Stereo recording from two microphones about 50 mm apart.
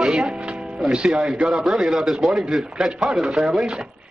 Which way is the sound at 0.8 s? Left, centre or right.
Centre.